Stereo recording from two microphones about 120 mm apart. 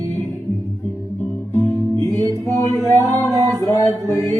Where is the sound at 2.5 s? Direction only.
30° left (ahead or behind).